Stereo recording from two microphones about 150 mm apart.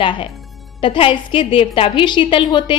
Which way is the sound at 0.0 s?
35° left (ahead or behind).